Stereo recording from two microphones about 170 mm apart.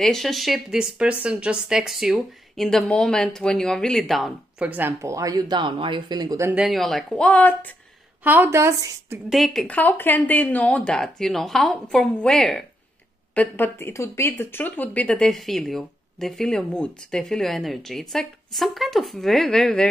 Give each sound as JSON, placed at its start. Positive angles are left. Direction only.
{"t": 0.0, "sound": "speech", "side_deg": 0}
{"t": 6.5, "sound": "speech", "side_deg": 0}
{"t": 8.2, "sound": "a woman's voice", "side_deg": -10}
{"t": 9.3, "sound": "speech", "side_deg": 0}